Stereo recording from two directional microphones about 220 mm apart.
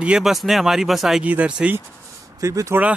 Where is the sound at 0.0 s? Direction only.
5° right (ahead or behind).